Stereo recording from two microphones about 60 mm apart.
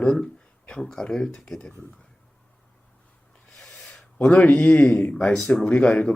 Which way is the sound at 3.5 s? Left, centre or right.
Centre.